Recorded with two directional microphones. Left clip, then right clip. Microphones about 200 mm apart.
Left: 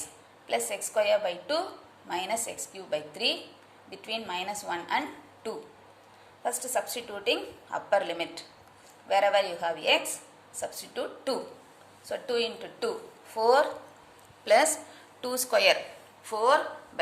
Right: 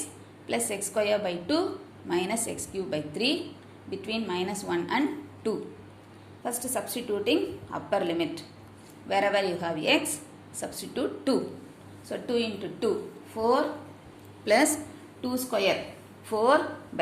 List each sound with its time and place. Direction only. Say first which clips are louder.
0.0 s a woman's voice: right 4 dB; 10° left (ahead or behind)
12.0 s a woman's voice: even; 15° left (ahead or behind)
13.3 s speech: left 2 dB; 30° left (ahead or behind)
14.4 s a woman's voice: left 1 dB; 15° left (ahead or behind)
15.2 s a woman's voice: left 3 dB; 30° left (ahead or behind)
16.3 s speech: right 1 dB; centre (ahead or behind)